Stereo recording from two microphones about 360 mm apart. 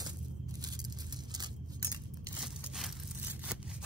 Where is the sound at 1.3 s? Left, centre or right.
Centre.